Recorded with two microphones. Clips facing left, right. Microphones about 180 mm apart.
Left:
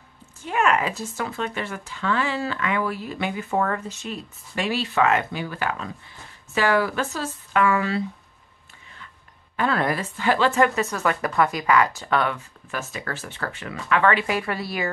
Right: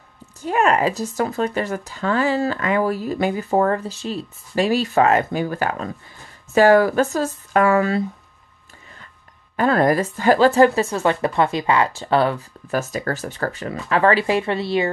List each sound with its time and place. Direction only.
0.4 s speech: 40° right (ahead or behind)
9.6 s speech: 45° right (ahead or behind); by 14.9 s 25° right (ahead or behind)